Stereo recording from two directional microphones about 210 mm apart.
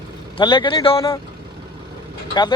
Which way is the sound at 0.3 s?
25° left (ahead or behind).